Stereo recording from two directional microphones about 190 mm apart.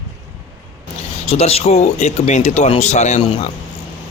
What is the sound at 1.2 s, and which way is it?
A man's voice, 30° left (ahead or behind).